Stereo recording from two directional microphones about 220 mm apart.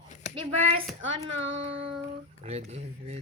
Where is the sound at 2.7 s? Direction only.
30° right (ahead or behind).